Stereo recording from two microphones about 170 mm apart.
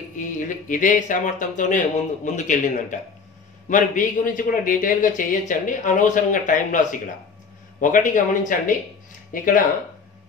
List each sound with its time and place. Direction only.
0.1 s a man's voice: 50° left (ahead or behind)